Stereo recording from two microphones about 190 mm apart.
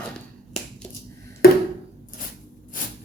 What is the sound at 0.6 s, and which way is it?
Finger snapping, centre (ahead or behind).